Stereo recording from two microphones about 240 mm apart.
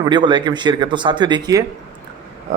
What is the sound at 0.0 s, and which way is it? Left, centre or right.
Speech, centre.